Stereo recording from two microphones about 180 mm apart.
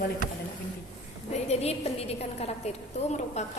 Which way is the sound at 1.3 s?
35° left (ahead or behind).